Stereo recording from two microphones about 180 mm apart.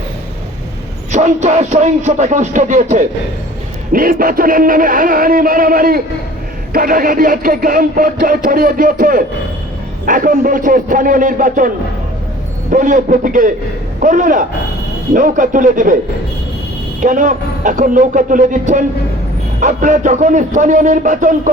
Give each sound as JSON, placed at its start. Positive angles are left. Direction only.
{"t": 1.1, "sound": "music", "side_deg": -40}
{"t": 3.9, "sound": "speech", "side_deg": -50}
{"t": 12.7, "sound": "speech", "side_deg": -45}
{"t": 17.0, "sound": "speech", "side_deg": -45}